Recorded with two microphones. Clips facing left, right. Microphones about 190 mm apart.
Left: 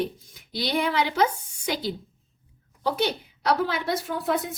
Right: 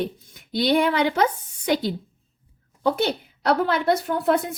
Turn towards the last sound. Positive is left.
turn(degrees=-60)  # may be behind; listen again after turning